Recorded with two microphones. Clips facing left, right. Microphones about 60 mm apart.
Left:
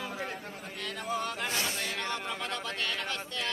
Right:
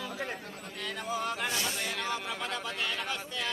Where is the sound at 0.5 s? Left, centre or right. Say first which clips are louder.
Even; centre.